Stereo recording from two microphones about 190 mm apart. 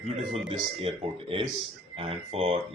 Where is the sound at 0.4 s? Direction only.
30° right (ahead or behind).